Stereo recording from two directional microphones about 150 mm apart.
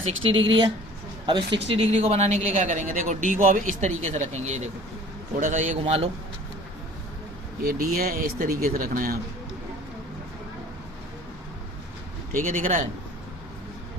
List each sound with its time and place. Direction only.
0.0 s a man's voice: 35° right (ahead or behind)
7.7 s speech: 75° right (ahead or behind)
12.3 s a man's voice: 65° right (ahead or behind)